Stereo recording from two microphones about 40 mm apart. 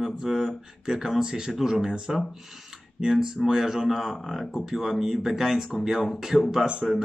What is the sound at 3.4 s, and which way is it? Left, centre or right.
Speech, centre.